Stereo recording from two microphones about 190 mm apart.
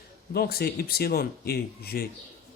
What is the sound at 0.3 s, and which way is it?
Speech, 55° left (ahead or behind).